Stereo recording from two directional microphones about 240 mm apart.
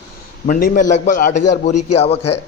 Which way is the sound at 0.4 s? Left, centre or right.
Left.